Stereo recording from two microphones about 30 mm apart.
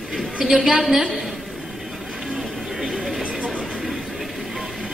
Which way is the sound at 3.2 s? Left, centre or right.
Right.